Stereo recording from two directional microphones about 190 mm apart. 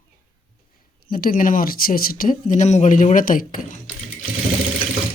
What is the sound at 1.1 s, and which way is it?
Speech, 50° left (ahead or behind).